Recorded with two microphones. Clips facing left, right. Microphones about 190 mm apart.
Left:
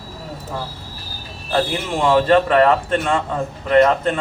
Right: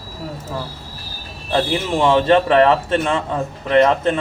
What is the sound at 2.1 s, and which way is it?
Speech, 25° right (ahead or behind).